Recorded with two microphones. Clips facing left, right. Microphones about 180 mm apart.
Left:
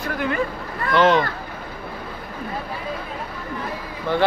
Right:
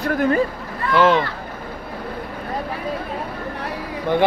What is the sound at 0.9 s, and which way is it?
Speech, 5° right (ahead or behind).